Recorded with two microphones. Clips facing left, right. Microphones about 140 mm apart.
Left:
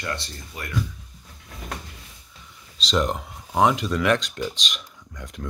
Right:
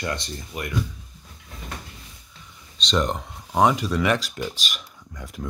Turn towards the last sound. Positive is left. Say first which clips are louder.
# right 1 dB
turn(degrees=-5)  # may be behind; listen again after turning